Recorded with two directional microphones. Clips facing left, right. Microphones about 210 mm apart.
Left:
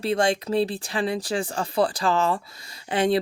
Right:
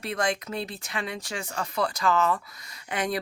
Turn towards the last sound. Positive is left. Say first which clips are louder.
# left 7 dB
turn(degrees=30)  # may be behind; listen again after turning